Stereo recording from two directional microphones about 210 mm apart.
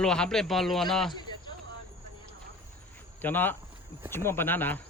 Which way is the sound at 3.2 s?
10° left (ahead or behind).